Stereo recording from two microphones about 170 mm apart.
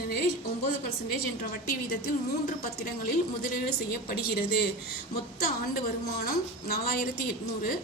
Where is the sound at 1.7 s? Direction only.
60° left (ahead or behind).